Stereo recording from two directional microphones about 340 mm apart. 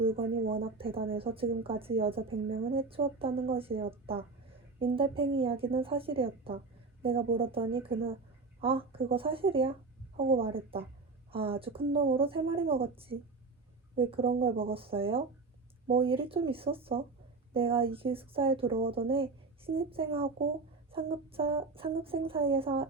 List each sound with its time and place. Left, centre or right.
0.0 s speech: centre